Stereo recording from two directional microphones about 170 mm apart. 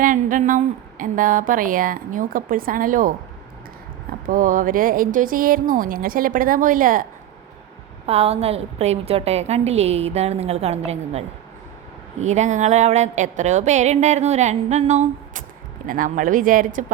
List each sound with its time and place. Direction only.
0.0 s a woman's voice: 50° right (ahead or behind)
4.3 s a woman's voice: 50° right (ahead or behind)
8.0 s a woman's voice: 35° right (ahead or behind); by 16.8 s 55° right (ahead or behind)